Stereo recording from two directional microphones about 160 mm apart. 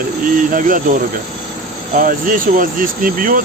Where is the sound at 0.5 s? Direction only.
55° right (ahead or behind).